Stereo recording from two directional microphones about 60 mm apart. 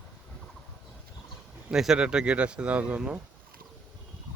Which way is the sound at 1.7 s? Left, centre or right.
Centre.